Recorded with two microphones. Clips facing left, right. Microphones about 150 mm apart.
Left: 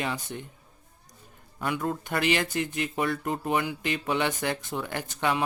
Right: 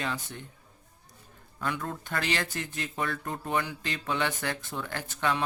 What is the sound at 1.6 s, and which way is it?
Speech, 15° left (ahead or behind).